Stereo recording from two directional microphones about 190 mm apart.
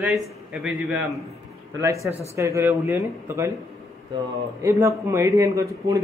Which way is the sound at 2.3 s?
15° right (ahead or behind).